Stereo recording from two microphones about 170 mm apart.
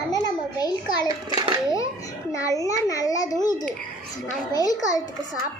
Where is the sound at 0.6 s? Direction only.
25° left (ahead or behind).